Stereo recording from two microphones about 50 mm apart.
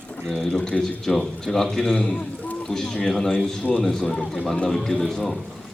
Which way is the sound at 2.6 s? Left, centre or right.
Centre.